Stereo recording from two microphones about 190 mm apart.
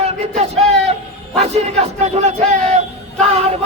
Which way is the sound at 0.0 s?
35° right (ahead or behind).